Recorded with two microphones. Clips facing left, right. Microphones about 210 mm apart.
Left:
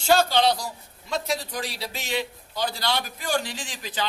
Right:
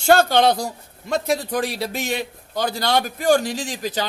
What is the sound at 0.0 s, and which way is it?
A man's voice, 55° right (ahead or behind).